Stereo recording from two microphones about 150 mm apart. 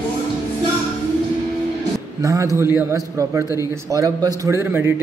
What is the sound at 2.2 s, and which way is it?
A man's voice, 20° right (ahead or behind).